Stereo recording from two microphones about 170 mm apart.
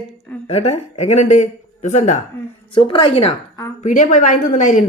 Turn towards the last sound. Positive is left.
turn(degrees=50)  # may be behind; listen again after turning